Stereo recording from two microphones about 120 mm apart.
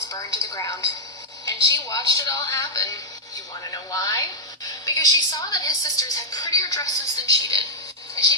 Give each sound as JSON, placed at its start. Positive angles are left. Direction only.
{"t": 0.1, "sound": "a woman's voice", "side_deg": 30}